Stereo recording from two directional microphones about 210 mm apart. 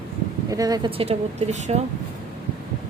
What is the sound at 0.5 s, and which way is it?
Speech, 15° right (ahead or behind).